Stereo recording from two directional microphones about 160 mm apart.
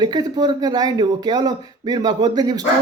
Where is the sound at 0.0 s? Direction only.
25° right (ahead or behind).